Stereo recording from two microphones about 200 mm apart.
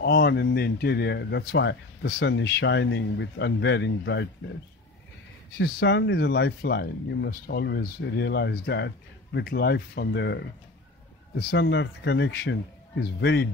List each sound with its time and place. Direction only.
0.0 s speech: 55° left (ahead or behind)
5.6 s speech: 60° left (ahead or behind)